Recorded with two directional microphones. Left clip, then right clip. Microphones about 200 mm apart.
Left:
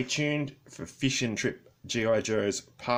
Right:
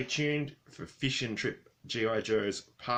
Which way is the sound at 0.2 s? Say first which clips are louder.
Left 2 dB; 35° left (ahead or behind).